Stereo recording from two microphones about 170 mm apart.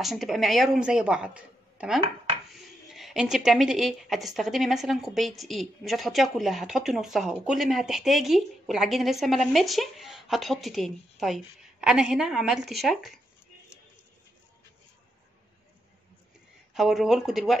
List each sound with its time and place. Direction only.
0.0 s a woman's voice: centre (ahead or behind)
16.7 s a woman's voice: centre (ahead or behind)